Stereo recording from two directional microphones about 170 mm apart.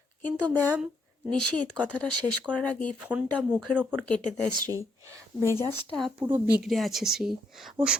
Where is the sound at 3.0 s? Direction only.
10° right (ahead or behind).